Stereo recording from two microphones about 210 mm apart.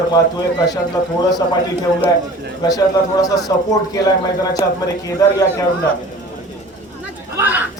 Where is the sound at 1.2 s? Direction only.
20° left (ahead or behind).